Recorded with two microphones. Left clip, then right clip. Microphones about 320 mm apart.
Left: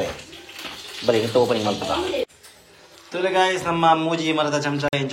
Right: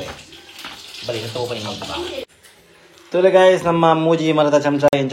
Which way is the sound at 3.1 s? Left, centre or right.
Centre.